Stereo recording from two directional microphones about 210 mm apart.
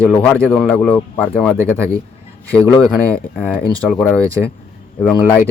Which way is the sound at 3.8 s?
Centre (ahead or behind).